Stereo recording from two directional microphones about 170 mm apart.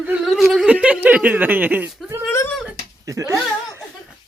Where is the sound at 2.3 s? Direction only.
15° left (ahead or behind).